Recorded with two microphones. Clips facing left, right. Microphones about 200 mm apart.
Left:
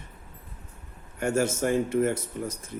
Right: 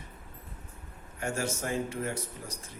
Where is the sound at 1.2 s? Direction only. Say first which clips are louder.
Left 8 dB; 55° left (ahead or behind).